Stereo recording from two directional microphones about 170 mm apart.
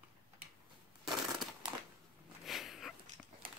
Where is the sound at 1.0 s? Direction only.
Centre (ahead or behind).